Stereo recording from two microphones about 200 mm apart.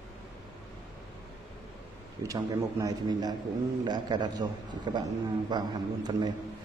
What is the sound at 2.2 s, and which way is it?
A man's voice, 15° right (ahead or behind).